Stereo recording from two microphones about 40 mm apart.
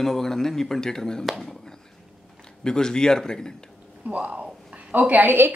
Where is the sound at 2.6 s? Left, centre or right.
Centre.